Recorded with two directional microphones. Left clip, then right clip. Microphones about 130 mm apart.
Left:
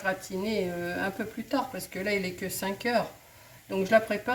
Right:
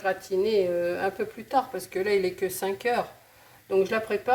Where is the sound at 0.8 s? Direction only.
35° right (ahead or behind).